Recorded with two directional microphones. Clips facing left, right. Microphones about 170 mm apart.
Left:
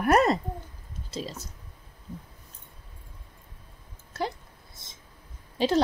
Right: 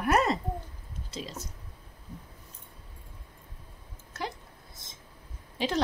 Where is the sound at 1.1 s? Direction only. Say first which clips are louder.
Left 4 dB; 35° left (ahead or behind).